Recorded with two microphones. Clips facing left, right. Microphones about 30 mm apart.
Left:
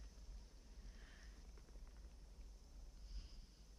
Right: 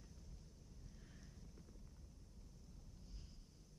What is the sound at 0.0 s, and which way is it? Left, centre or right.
Boat, centre.